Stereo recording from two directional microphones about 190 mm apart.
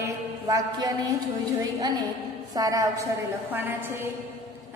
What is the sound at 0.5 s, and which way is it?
Speech, 20° right (ahead or behind).